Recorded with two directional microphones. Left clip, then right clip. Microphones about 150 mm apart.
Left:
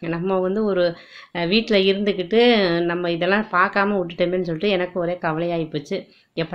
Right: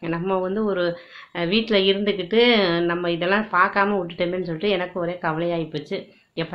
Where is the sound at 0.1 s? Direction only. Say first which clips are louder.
Left 2 dB; 25° left (ahead or behind).